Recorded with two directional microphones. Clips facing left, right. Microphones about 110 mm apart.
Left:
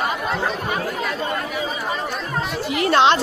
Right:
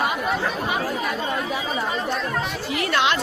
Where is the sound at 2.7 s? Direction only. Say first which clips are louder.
Left 6 dB; 25° left (ahead or behind).